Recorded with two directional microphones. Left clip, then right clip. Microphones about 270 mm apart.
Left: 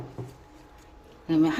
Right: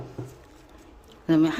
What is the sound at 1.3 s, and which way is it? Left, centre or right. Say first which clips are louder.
Speech: right 2 dB; centre.